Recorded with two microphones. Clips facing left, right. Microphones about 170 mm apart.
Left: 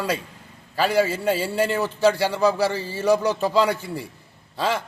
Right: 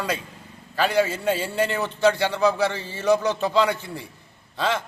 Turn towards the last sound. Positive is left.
turn(degrees=5)  # may be behind; listen again after turning